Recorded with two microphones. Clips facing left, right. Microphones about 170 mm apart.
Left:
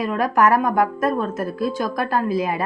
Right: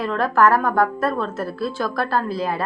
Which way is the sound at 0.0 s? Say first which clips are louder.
Even; 15° left (ahead or behind).